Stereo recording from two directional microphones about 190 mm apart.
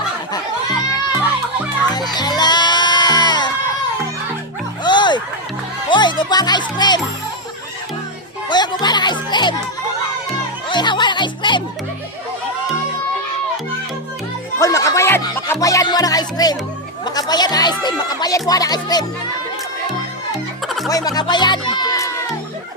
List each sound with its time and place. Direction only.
1.9 s music: 20° left (ahead or behind)
4.8 s music: 25° left (ahead or behind)
5.9 s speech: 25° left (ahead or behind)
8.4 s music: 20° left (ahead or behind)
10.7 s music: 25° left (ahead or behind)
14.6 s music: 15° left (ahead or behind)
17.2 s speech: 20° left (ahead or behind)
20.7 s music: centre (ahead or behind)
20.9 s speech: 20° left (ahead or behind)